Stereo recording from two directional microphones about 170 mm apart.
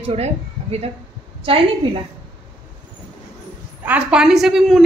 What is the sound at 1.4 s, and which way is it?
Speech, 30° right (ahead or behind).